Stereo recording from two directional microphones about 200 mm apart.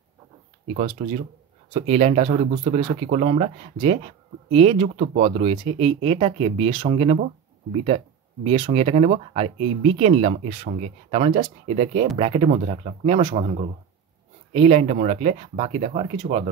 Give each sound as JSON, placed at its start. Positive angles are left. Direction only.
{"t": 0.7, "sound": "speech", "side_deg": -35}